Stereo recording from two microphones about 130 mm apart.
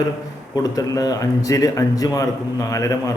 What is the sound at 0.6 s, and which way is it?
A man's voice, 25° left (ahead or behind).